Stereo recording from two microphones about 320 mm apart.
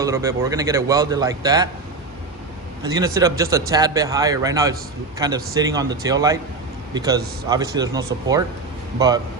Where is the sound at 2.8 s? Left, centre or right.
Centre.